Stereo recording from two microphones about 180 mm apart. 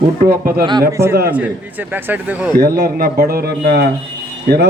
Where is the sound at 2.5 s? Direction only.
60° right (ahead or behind).